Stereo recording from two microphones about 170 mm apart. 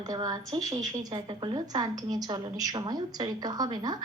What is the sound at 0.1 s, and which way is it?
A woman's voice, 20° right (ahead or behind).